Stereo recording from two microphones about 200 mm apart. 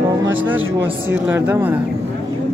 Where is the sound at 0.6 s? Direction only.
80° right.